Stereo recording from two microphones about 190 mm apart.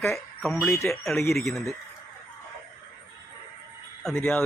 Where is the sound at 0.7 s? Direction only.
15° left (ahead or behind).